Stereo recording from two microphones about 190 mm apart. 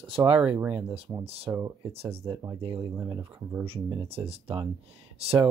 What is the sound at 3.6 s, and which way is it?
Speech, 30° right (ahead or behind).